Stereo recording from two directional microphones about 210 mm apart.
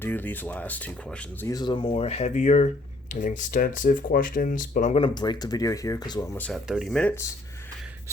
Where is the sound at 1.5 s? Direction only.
20° left (ahead or behind).